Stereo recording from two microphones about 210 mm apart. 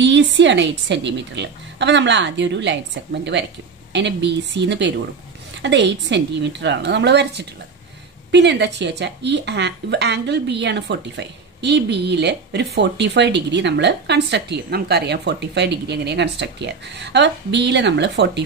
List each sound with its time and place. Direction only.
0.0 s speech: 60° right (ahead or behind)
3.9 s speech: 55° right (ahead or behind)